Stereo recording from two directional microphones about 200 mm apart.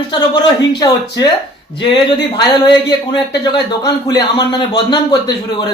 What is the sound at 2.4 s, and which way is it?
A man's voice, 20° left (ahead or behind).